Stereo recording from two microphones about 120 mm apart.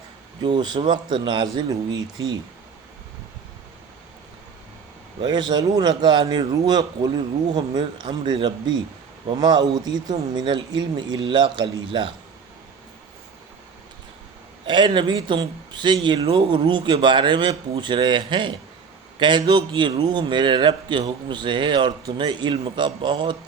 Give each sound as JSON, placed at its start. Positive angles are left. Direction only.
{"t": 0.4, "sound": "speech", "side_deg": -40}
{"t": 5.2, "sound": "a man's voice", "side_deg": -35}
{"t": 14.7, "sound": "speech", "side_deg": -40}